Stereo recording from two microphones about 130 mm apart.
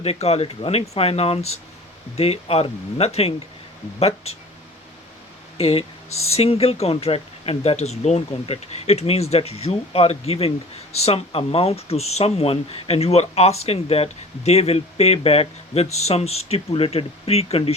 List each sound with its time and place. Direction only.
0.0 s speech: 50° left (ahead or behind)
5.5 s speech: 50° left (ahead or behind)